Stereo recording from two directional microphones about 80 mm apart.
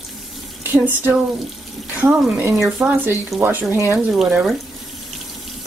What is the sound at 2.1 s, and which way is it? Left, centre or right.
Speech, centre.